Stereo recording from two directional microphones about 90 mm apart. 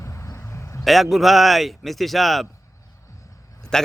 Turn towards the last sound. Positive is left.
turn(degrees=5)  # may be behind; listen again after turning